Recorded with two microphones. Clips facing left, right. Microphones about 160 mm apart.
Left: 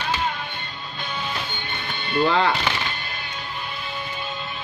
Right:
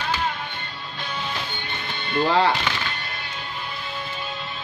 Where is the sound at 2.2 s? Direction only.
35° right (ahead or behind).